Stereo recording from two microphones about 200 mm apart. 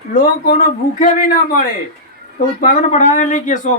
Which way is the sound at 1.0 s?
40° left (ahead or behind).